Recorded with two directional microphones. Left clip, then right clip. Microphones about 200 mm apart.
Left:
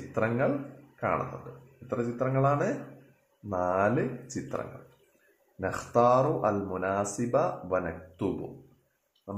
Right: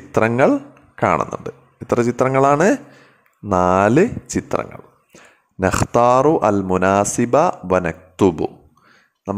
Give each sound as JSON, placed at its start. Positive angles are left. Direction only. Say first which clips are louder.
{"t": 0.1, "sound": "speech", "louder": "right 13 dB", "side_deg": -55}